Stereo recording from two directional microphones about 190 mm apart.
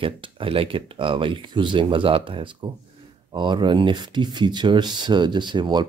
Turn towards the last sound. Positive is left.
turn(degrees=-25)  # may be behind; listen again after turning